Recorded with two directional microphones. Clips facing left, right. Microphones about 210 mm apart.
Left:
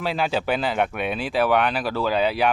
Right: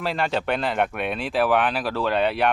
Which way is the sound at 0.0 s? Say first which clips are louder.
Left 1 dB; centre (ahead or behind).